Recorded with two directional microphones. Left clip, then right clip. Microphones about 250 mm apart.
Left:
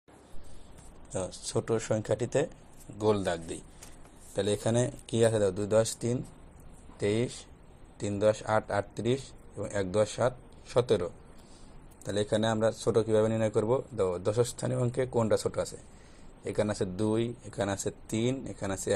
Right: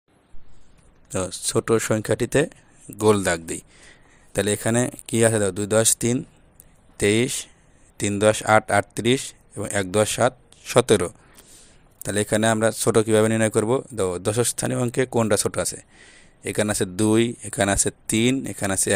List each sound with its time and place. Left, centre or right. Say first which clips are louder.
1.1 s speech: right 9 dB; right
3.0 s speech: right 9 dB; right